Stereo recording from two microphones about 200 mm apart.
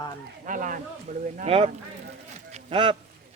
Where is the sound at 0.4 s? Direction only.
40° right (ahead or behind).